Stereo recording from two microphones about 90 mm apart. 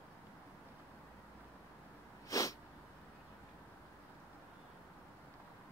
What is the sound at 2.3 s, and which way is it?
Sneeze, 40° left (ahead or behind).